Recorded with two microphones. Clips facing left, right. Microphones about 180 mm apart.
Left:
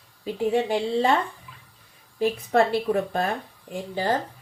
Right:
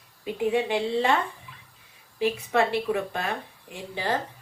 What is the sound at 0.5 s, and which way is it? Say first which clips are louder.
Speech: left 2 dB; 45° left (ahead or behind).